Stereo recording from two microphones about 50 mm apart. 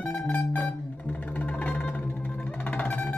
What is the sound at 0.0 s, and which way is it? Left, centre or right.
Music, left.